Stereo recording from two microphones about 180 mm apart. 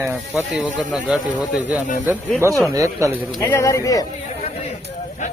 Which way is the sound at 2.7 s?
15° right (ahead or behind).